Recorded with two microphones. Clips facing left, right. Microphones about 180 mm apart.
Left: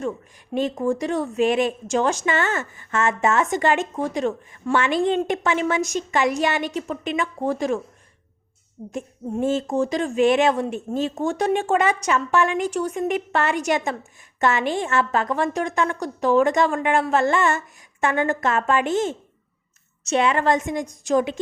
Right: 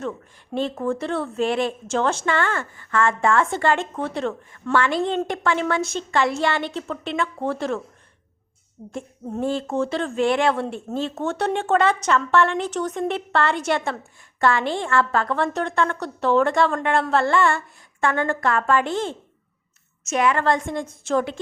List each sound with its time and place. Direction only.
0.5 s speech: 15° left (ahead or behind)
8.9 s a woman's voice: 20° left (ahead or behind)